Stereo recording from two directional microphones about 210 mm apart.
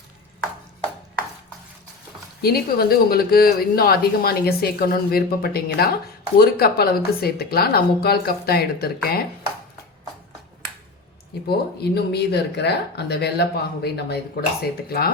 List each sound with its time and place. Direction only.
2.4 s speech: 45° left (ahead or behind)
11.4 s speech: 50° left (ahead or behind)